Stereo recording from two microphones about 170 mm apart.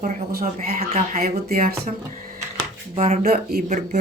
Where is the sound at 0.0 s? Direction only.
60° right (ahead or behind).